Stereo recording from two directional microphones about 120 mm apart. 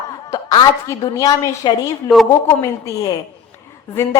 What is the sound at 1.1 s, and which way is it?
A woman's voice, 30° left (ahead or behind).